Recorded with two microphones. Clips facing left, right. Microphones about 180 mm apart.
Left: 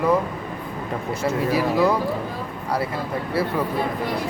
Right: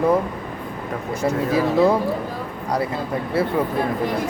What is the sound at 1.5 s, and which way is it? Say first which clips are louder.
Speech: right 3 dB; 25° right (ahead or behind).